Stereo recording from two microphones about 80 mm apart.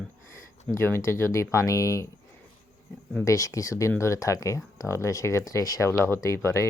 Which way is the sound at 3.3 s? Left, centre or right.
Left.